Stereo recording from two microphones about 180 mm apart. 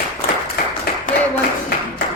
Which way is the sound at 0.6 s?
60° left (ahead or behind).